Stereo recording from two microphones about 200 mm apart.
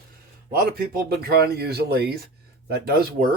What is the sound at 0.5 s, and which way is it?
Speech, 50° right (ahead or behind).